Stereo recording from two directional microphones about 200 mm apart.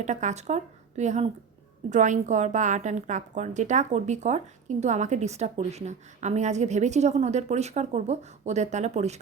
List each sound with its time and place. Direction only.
0.0 s a woman's voice: 35° right (ahead or behind)